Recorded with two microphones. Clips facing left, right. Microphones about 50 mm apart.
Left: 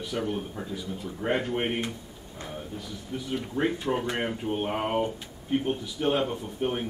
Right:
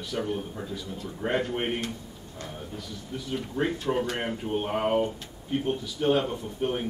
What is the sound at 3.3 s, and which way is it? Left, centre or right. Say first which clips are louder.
Speech: left 1 dB; centre.